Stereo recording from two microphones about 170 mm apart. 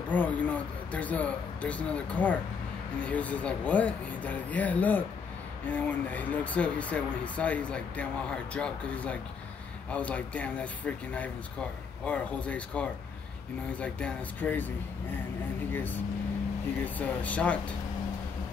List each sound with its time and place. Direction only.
0.1 s speech: 10° left (ahead or behind)
16.8 s speech: 10° left (ahead or behind)